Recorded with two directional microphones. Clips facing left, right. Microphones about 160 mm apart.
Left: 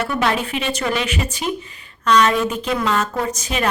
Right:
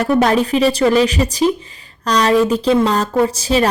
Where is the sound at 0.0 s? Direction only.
40° right (ahead or behind).